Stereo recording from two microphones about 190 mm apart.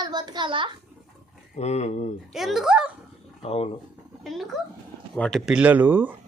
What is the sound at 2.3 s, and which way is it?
Speech, centre (ahead or behind).